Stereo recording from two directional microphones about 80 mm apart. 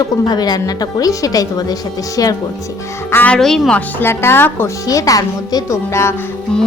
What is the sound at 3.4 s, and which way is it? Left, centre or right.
Speech, centre.